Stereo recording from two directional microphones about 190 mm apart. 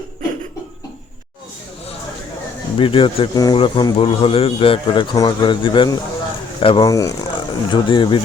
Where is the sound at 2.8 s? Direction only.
25° left (ahead or behind).